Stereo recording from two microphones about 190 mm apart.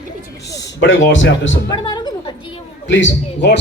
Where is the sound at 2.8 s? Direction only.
75° left (ahead or behind).